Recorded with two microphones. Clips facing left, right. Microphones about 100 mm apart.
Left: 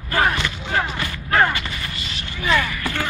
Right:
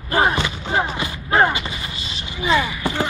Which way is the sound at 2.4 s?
20° right (ahead or behind).